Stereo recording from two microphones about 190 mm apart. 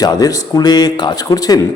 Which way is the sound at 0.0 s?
20° left (ahead or behind).